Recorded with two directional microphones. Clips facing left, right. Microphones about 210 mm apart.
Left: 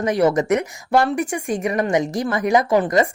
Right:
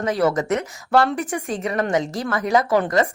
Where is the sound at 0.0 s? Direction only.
15° left (ahead or behind).